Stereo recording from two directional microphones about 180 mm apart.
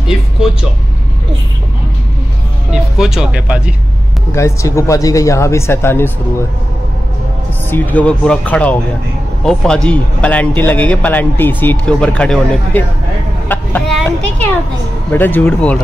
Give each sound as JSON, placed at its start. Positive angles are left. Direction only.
{"t": 0.0, "sound": "speech", "side_deg": -5}
{"t": 2.7, "sound": "speech", "side_deg": -5}
{"t": 4.3, "sound": "a man's voice", "side_deg": 15}
{"t": 7.7, "sound": "a man's voice", "side_deg": 10}
{"t": 13.5, "sound": "a sound", "side_deg": 5}
{"t": 14.0, "sound": "a man's voice", "side_deg": 10}